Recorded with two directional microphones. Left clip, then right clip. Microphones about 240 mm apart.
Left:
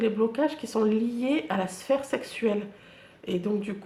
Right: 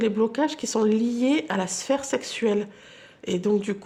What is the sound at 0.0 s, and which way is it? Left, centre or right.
Speech, right.